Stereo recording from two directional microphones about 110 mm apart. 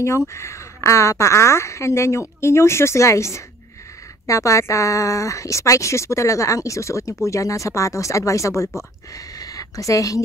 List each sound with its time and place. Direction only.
0.3 s a woman's voice: 25° left (ahead or behind)